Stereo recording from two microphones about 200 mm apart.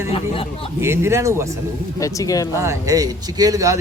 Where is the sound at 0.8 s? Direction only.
15° right (ahead or behind).